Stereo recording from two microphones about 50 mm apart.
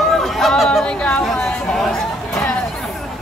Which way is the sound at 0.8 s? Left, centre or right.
Left.